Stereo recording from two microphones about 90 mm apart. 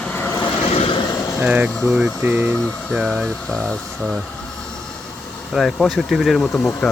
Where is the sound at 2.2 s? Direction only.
20° right (ahead or behind).